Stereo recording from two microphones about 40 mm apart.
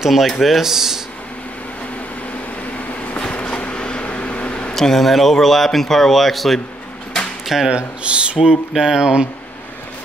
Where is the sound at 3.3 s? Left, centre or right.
Left.